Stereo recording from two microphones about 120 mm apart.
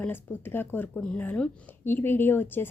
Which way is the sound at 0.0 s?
15° left (ahead or behind).